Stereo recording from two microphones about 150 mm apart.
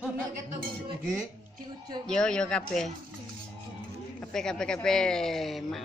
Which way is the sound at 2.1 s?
5° left (ahead or behind).